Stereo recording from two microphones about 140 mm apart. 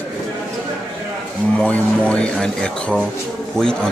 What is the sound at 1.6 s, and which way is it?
Speech, 10° left (ahead or behind).